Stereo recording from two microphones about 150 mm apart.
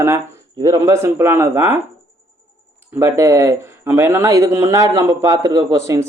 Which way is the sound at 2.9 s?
15° right (ahead or behind).